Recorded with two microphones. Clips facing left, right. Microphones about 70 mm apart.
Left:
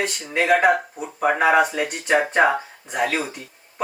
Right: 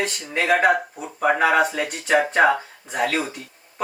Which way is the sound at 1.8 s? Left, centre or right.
Centre.